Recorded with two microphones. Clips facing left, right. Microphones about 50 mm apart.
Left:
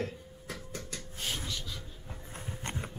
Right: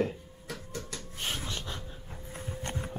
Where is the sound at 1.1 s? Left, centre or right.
Right.